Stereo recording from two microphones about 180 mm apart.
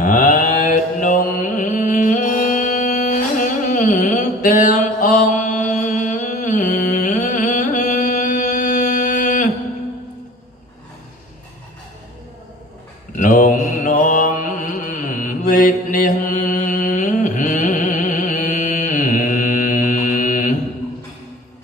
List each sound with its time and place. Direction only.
0.0 s mantra: 50° left (ahead or behind)
13.1 s mantra: 45° left (ahead or behind)